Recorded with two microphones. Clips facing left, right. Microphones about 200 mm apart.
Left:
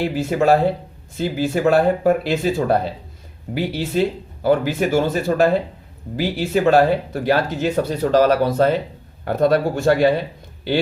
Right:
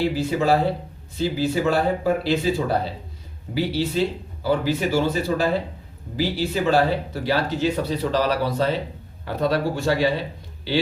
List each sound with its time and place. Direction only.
0.0 s speech: 50° left (ahead or behind)